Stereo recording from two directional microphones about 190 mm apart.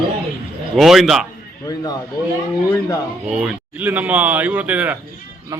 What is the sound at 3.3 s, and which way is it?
Speech, 5° right (ahead or behind).